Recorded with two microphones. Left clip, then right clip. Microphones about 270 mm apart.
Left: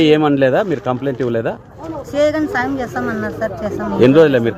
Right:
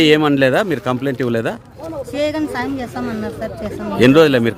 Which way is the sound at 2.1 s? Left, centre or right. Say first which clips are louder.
Left 5 dB; centre.